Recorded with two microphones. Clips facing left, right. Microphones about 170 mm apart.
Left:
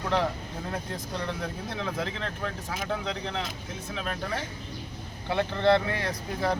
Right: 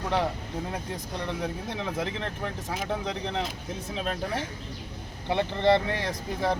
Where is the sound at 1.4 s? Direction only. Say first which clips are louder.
Right 2 dB; 15° right (ahead or behind).